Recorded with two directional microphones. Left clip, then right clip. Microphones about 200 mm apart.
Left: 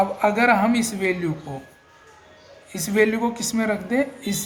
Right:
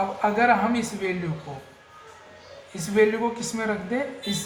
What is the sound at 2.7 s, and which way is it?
A woman's voice, 55° left (ahead or behind).